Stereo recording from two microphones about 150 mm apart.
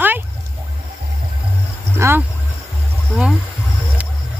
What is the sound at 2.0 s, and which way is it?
Speech, 20° right (ahead or behind).